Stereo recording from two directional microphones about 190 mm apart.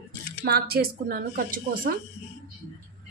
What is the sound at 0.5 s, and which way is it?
A woman's voice, 55° right (ahead or behind).